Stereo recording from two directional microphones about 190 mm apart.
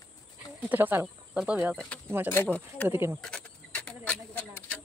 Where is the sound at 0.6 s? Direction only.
10° right (ahead or behind).